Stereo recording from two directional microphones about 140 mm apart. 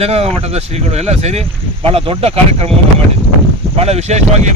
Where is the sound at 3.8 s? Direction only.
50° right (ahead or behind).